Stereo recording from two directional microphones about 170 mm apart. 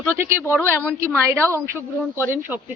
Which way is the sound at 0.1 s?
15° right (ahead or behind).